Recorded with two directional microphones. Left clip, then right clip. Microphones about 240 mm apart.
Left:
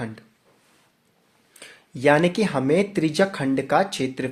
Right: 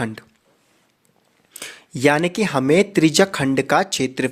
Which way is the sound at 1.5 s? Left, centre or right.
Right.